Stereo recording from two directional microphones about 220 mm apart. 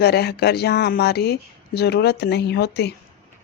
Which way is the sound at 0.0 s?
45° left (ahead or behind).